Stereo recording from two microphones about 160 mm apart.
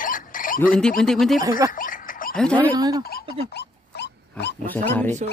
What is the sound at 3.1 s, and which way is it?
Pig, 90° left.